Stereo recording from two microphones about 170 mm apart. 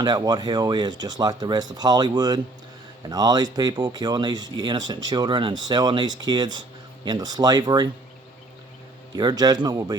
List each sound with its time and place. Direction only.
0.0 s speech: 25° right (ahead or behind)
9.1 s speech: 25° right (ahead or behind)